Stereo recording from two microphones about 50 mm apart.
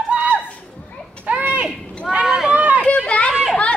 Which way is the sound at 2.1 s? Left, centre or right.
Right.